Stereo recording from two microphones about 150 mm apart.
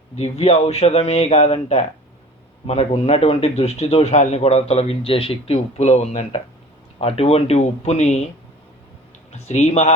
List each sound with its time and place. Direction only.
0.2 s a man's voice: 45° left (ahead or behind)
2.6 s a man's voice: 40° left (ahead or behind)
9.5 s a man's voice: 45° left (ahead or behind)